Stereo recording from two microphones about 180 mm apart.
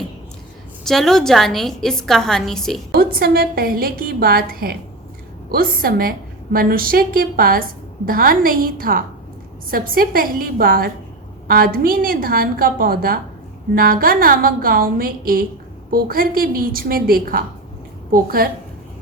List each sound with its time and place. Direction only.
0.9 s a woman's voice: centre (ahead or behind)
2.9 s a woman's voice: 55° right (ahead or behind)